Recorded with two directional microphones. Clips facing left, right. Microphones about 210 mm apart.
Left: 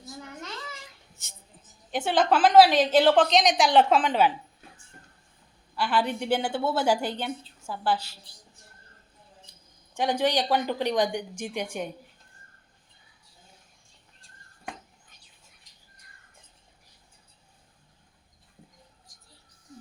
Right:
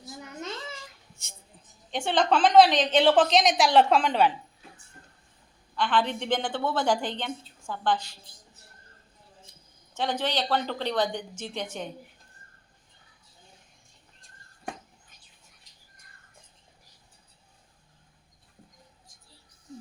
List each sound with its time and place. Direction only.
0.2 s a sound: 20° right (ahead or behind)
1.1 s a woman's voice: centre (ahead or behind)
5.7 s a woman's voice: 10° left (ahead or behind)
9.9 s a woman's voice: 15° left (ahead or behind)